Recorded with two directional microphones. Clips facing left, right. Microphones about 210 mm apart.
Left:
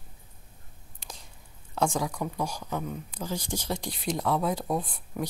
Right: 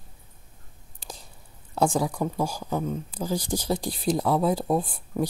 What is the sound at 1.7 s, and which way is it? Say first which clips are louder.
Speech: right 4 dB; 35° right (ahead or behind).